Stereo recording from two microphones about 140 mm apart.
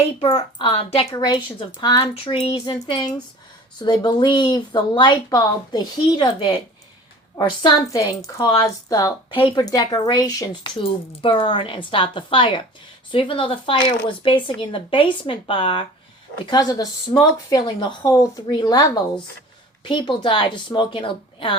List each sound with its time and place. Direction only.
0.0 s a woman's voice: 40° left (ahead or behind)
1.1 s speech: 25° left (ahead or behind)